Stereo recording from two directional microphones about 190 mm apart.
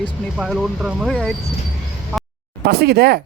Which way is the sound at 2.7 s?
55° right (ahead or behind).